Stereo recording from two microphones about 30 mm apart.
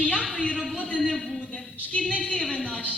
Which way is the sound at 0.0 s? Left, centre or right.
Left.